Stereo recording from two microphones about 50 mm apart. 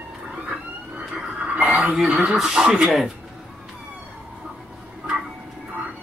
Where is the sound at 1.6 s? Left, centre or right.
Right.